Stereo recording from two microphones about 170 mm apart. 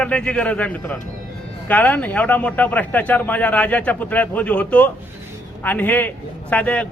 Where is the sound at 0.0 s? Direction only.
5° left (ahead or behind).